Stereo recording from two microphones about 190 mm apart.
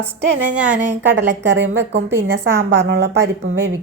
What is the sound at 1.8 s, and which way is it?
A woman's voice, 65° right (ahead or behind).